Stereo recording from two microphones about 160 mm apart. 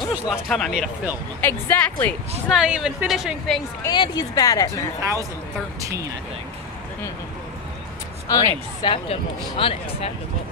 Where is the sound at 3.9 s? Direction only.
25° left (ahead or behind).